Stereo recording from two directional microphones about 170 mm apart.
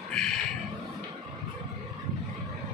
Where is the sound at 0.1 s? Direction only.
5° left (ahead or behind).